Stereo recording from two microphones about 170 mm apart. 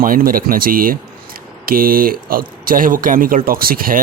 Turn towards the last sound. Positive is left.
turn(degrees=-60)  # may be behind; listen again after turning